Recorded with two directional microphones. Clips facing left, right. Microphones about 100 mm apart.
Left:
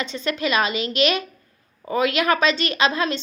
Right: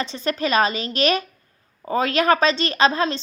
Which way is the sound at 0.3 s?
40° right (ahead or behind).